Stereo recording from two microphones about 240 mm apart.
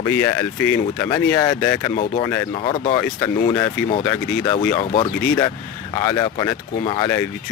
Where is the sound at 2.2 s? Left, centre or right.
Centre.